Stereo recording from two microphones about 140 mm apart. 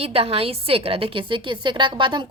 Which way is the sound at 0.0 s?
45° right (ahead or behind).